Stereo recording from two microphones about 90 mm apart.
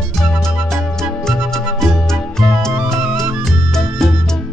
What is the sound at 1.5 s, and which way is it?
Music, 5° left (ahead or behind).